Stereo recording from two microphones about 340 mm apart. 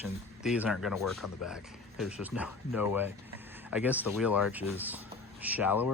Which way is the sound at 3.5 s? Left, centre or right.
Centre.